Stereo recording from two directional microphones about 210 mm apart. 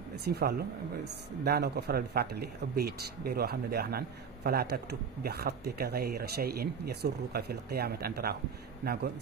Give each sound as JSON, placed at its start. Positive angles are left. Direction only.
{"t": 0.2, "sound": "speech", "side_deg": -50}